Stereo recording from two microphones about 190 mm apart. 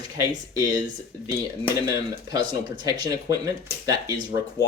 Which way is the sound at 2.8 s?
20° right (ahead or behind).